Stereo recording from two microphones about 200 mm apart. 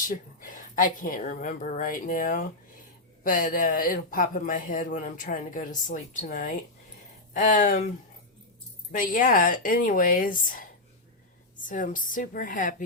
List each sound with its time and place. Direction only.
0.1 s speech: 40° left (ahead or behind)
8.9 s speech: 40° left (ahead or behind)